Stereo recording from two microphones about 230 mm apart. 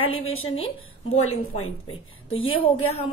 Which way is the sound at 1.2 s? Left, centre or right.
Left.